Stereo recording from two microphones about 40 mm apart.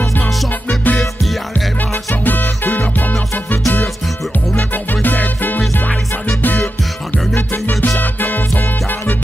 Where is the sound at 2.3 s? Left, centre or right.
Left.